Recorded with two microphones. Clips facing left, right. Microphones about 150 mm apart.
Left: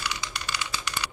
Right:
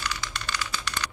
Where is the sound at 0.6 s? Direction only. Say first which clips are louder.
Even; 10° left (ahead or behind).